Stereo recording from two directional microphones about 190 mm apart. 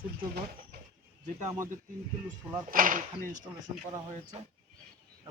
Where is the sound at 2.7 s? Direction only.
45° right (ahead or behind).